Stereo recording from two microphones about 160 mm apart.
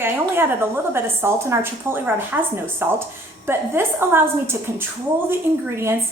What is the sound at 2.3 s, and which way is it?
A woman's voice, 10° right (ahead or behind).